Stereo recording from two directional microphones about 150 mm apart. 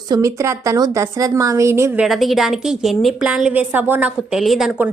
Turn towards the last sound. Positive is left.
turn(degrees=-5)  # may be behind; listen again after turning